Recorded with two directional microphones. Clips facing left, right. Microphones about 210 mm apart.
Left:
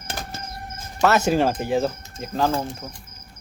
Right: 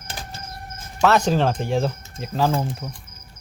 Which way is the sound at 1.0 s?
5° left (ahead or behind).